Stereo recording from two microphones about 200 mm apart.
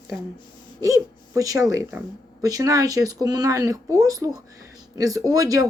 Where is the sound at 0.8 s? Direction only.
15° right (ahead or behind).